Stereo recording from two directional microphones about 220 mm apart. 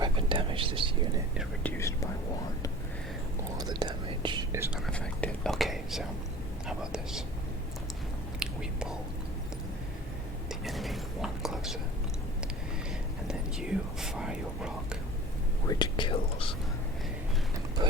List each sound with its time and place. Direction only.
0.0 s whispering: 25° right (ahead or behind)
3.6 s whispering: 20° right (ahead or behind)
4.9 s whispering: 5° left (ahead or behind)
6.7 s speech: centre (ahead or behind)
8.4 s whispering: 5° right (ahead or behind)
10.5 s whispering: centre (ahead or behind)
13.2 s whispering: 5° right (ahead or behind)
15.6 s whispering: 20° left (ahead or behind)
17.8 s a sound: 20° right (ahead or behind)